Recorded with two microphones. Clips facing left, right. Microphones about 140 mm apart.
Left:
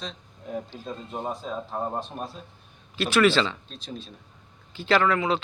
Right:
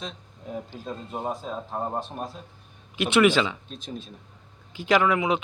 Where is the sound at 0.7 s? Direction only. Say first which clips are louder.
Right 1 dB; 5° right (ahead or behind).